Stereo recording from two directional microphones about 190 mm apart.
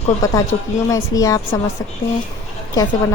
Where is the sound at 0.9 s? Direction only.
15° left (ahead or behind).